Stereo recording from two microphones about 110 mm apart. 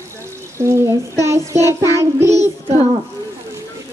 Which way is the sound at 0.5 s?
25° right (ahead or behind).